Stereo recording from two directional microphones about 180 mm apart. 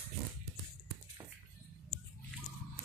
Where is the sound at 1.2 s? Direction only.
15° right (ahead or behind).